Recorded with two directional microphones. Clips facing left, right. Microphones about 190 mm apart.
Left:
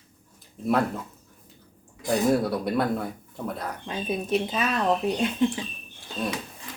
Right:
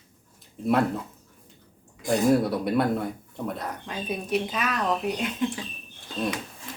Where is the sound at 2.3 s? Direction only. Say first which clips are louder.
Right 1 dB; centre (ahead or behind).